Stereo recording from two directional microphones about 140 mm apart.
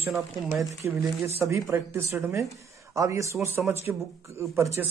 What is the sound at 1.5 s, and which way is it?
Speech, 20° right (ahead or behind).